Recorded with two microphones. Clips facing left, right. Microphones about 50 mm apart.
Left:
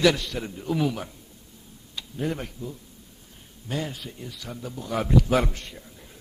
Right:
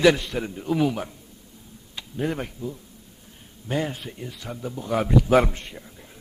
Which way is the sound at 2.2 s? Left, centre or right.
Centre.